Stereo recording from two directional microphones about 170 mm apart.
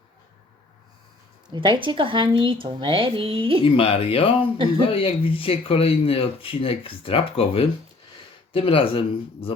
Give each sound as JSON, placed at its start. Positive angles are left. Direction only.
{"t": 1.5, "sound": "a woman's voice", "side_deg": -25}
{"t": 3.6, "sound": "speech", "side_deg": 35}